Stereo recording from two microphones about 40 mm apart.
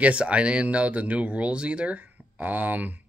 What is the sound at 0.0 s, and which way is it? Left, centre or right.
Speech, right.